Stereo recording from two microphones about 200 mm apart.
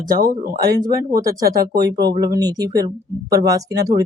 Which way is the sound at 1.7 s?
20° right (ahead or behind).